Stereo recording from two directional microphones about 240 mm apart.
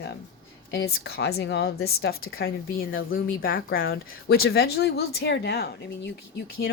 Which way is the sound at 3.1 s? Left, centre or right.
Left.